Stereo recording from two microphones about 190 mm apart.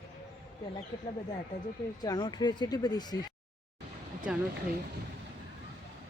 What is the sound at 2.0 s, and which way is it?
Speech, 20° left (ahead or behind).